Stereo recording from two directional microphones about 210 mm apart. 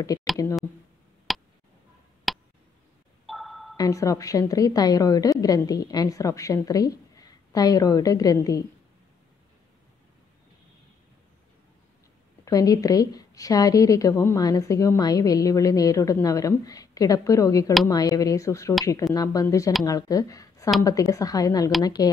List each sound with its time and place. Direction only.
0.0 s a woman's voice: 15° left (ahead or behind)
1.3 s tick: centre (ahead or behind)
3.3 s music: centre (ahead or behind)
3.7 s a woman's voice: 15° left (ahead or behind)
12.4 s a woman's voice: 15° left (ahead or behind)